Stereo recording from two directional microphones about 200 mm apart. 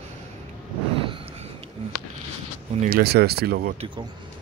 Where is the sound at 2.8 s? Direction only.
50° right (ahead or behind).